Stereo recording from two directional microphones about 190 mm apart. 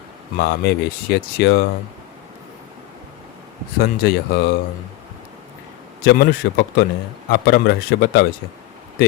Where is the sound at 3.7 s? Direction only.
55° left (ahead or behind).